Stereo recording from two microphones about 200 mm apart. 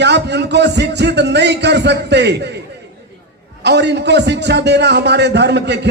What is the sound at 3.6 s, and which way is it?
A man's voice, 60° right (ahead or behind).